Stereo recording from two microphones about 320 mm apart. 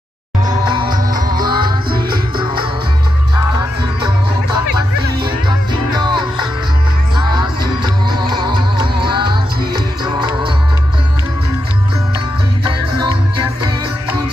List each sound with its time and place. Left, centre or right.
0.5 s music: centre
7.2 s music: centre